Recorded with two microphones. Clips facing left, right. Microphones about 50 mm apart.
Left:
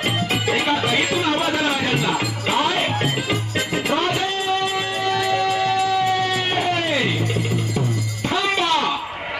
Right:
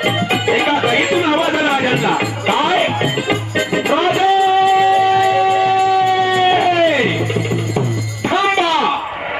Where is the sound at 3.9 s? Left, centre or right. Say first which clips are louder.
Right 10 dB; centre.